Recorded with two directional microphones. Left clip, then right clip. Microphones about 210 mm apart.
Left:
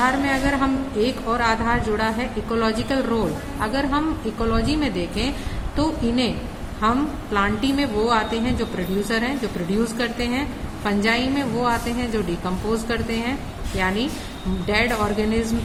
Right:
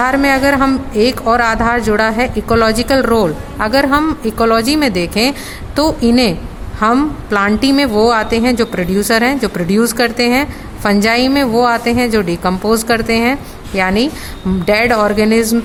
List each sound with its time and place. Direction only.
0.0 s a woman's voice: 55° right (ahead or behind)
7.3 s a woman's voice: 55° right (ahead or behind)